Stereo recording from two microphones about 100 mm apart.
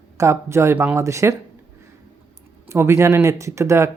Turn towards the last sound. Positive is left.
turn(degrees=-30)  # may be behind; listen again after turning